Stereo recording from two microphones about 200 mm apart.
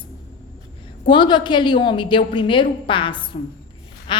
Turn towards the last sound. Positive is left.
turn(degrees=25)  # may be behind; listen again after turning